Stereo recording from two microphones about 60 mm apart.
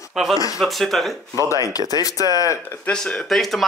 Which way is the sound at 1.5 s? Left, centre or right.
Left.